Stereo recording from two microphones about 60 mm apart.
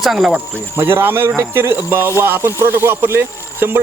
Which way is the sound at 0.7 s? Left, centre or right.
Right.